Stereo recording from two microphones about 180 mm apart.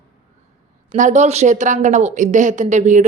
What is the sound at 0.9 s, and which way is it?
Speech, 45° right (ahead or behind).